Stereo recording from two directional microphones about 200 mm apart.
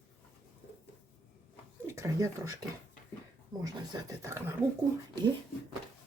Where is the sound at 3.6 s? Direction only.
15° right (ahead or behind).